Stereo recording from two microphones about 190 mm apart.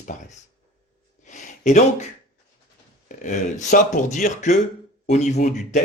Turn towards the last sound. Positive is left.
turn(degrees=40)  # may be behind; listen again after turning